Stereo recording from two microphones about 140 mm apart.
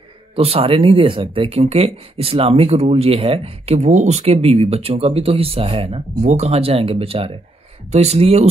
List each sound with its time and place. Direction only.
0.4 s speech: 45° right (ahead or behind)